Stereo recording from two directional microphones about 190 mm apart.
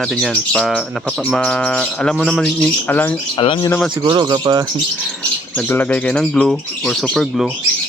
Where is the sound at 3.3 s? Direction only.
25° left (ahead or behind).